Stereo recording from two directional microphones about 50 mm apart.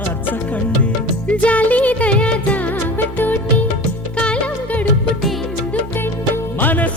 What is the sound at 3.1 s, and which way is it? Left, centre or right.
Music, left.